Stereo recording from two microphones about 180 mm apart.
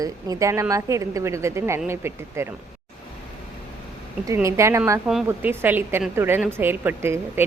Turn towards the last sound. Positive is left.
turn(degrees=-15)  # may be behind; listen again after turning